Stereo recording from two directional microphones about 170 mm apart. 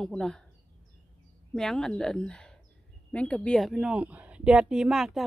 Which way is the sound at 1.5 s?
Centre (ahead or behind).